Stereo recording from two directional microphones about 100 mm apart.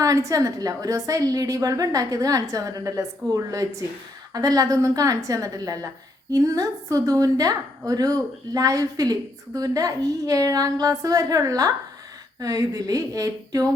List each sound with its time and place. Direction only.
0.0 s a woman's voice: 35° right (ahead or behind)